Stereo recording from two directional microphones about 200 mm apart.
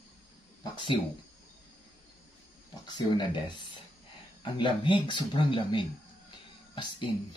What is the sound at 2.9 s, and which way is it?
Speech, 20° left (ahead or behind).